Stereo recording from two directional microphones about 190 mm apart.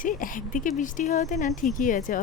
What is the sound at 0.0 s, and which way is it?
Speech, 45° left (ahead or behind).